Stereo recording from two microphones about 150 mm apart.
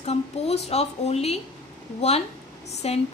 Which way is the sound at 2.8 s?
45° left (ahead or behind).